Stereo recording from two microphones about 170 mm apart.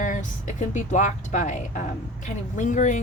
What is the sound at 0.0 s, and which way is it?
A woman's voice, 50° left (ahead or behind).